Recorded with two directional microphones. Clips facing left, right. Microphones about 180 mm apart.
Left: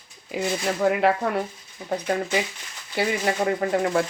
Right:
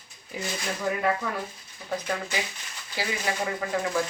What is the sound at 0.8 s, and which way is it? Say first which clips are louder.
Speech: left 6 dB; 75° left (ahead or behind).